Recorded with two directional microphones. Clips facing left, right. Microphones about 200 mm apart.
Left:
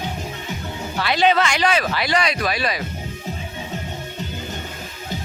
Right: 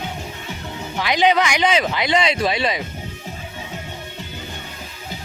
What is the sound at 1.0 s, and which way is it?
Speech, 15° right (ahead or behind).